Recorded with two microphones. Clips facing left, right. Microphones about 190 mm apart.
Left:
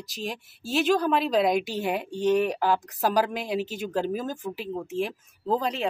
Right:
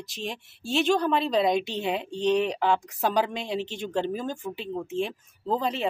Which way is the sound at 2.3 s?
5° left (ahead or behind).